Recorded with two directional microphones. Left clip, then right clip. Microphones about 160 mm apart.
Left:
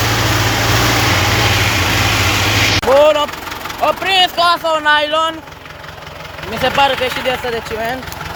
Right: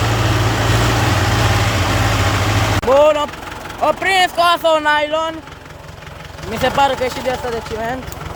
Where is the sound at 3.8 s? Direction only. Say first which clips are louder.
Left 1 dB; 15° right (ahead or behind).